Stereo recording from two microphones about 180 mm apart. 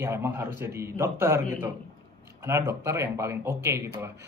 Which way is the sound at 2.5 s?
15° right (ahead or behind).